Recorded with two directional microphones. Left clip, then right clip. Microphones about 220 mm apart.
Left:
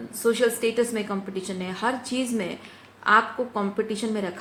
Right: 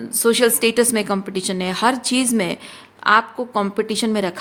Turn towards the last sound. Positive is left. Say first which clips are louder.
# right 7 dB
turn(degrees=-50)  # may be behind; listen again after turning